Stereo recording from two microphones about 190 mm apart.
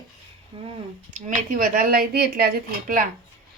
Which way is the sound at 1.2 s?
45° right (ahead or behind).